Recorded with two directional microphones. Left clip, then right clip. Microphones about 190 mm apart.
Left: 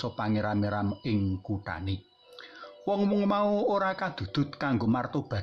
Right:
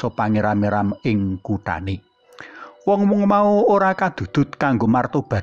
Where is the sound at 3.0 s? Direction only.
20° right (ahead or behind).